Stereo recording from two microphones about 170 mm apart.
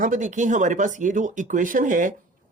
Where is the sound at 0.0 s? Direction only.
50° right (ahead or behind).